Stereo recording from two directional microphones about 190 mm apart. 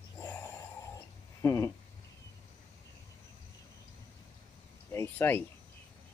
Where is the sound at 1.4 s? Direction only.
15° left (ahead or behind).